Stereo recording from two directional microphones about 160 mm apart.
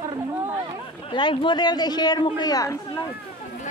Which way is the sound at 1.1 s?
30° left (ahead or behind).